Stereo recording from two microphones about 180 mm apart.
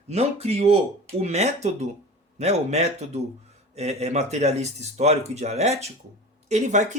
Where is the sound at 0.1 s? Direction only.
35° right (ahead or behind).